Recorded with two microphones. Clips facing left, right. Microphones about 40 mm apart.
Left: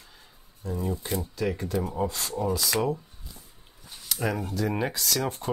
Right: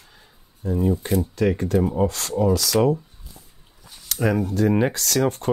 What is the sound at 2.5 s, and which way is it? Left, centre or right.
Speech, left.